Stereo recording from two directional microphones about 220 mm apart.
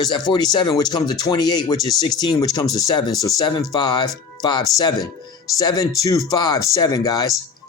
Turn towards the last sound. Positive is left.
turn(degrees=15)  # may be behind; listen again after turning